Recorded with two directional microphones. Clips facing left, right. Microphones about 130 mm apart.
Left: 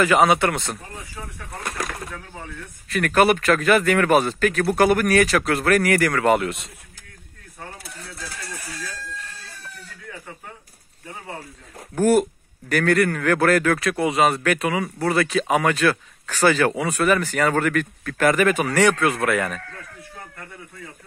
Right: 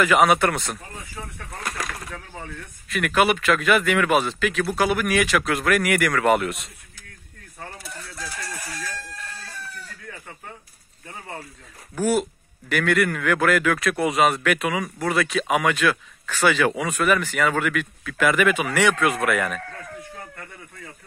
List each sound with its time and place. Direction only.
0.0 s speech: 30° left (ahead or behind)
2.9 s speech: 40° left (ahead or behind)
12.0 s speech: 45° left (ahead or behind); by 19.6 s 30° left (ahead or behind)